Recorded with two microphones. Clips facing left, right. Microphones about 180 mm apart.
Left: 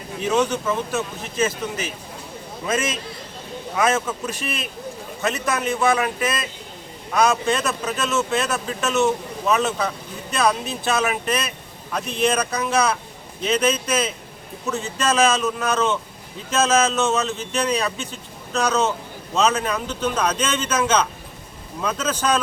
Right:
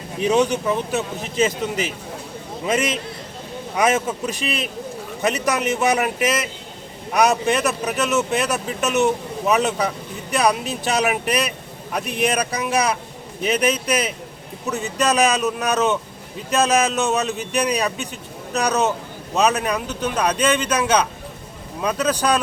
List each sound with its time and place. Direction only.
0.2 s speech: 15° right (ahead or behind)
3.8 s a man's voice: 15° right (ahead or behind)